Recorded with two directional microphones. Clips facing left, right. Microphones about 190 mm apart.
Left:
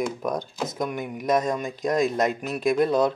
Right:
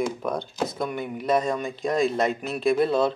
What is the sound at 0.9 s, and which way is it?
Speech, 15° left (ahead or behind).